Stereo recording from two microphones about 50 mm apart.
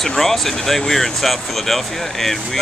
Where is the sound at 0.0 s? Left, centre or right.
Centre.